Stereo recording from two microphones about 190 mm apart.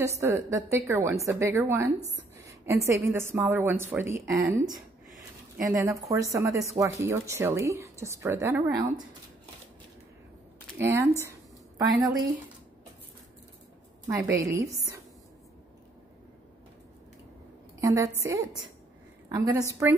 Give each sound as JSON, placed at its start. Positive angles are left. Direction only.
{"t": 0.2, "sound": "a woman's voice", "side_deg": -15}
{"t": 2.4, "sound": "a sound", "side_deg": -15}
{"t": 2.9, "sound": "a woman's voice", "side_deg": -15}
{"t": 10.8, "sound": "a woman's voice", "side_deg": -15}
{"t": 14.0, "sound": "a woman's voice", "side_deg": -15}
{"t": 17.7, "sound": "a woman's voice", "side_deg": -15}